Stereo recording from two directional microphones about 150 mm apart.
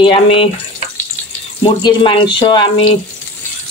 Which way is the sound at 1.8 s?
30° left (ahead or behind).